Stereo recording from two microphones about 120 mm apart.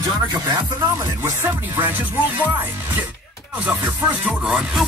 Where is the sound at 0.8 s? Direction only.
25° right (ahead or behind); by 4.8 s 5° right (ahead or behind).